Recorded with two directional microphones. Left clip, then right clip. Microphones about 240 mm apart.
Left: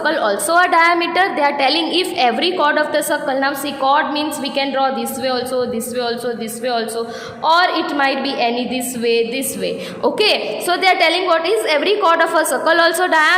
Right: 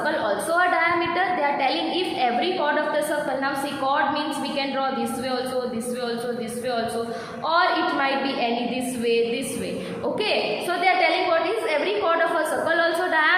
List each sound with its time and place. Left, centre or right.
0.0 s a woman's voice: left
7.4 s a woman's voice: left
10.0 s a woman's voice: left